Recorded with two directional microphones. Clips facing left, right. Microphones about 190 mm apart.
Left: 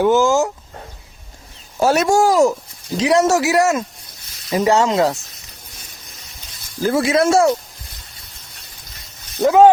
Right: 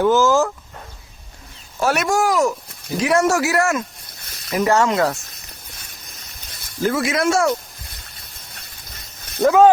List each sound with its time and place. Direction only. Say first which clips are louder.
0.0 s speech: left 1 dB; 15° left (ahead or behind)
1.8 s speech: left 4 dB; 25° left (ahead or behind)
6.8 s speech: left 3 dB; 30° left (ahead or behind)
9.4 s speech: left 2 dB; 25° left (ahead or behind)